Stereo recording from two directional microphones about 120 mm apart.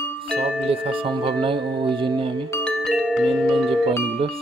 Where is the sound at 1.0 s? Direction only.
45° right (ahead or behind).